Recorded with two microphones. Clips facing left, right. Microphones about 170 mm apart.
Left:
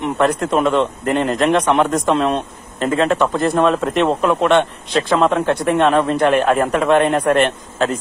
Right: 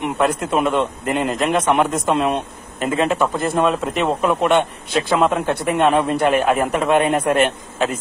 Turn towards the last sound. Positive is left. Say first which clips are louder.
# left 2 dB
turn(degrees=-5)  # may be behind; listen again after turning